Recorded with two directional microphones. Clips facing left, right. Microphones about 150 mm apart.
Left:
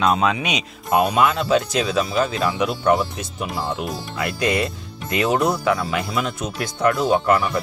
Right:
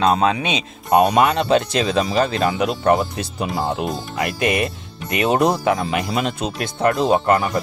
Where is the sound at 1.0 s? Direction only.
65° right (ahead or behind).